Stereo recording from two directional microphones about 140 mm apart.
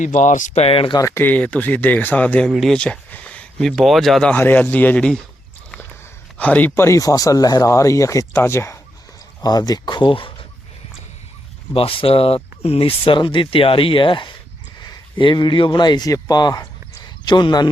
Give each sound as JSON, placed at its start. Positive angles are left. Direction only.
{"t": 0.0, "sound": "speech", "side_deg": 60}
{"t": 0.9, "sound": "speech", "side_deg": 20}
{"t": 6.3, "sound": "speech", "side_deg": 10}
{"t": 11.7, "sound": "speech", "side_deg": 40}